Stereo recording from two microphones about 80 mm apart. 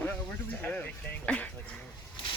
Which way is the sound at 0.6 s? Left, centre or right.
Left.